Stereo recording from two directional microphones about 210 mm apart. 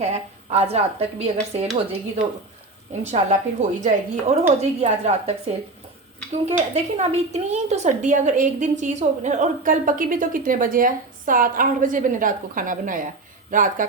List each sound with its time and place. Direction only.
0.0 s a woman's voice: 30° right (ahead or behind)
6.5 s a woman's voice: 30° right (ahead or behind)